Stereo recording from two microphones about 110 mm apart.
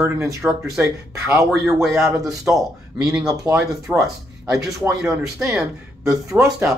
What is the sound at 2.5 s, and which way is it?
Speech, 20° right (ahead or behind).